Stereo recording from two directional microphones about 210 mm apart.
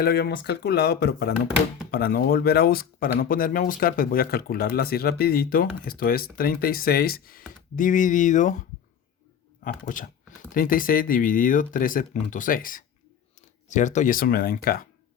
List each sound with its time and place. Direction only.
0.0 s speech: 50° left (ahead or behind)
9.8 s speech: 40° left (ahead or behind)